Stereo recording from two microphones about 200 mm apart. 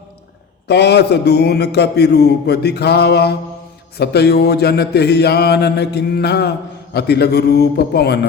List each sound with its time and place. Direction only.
0.7 s a man's voice: 55° left (ahead or behind)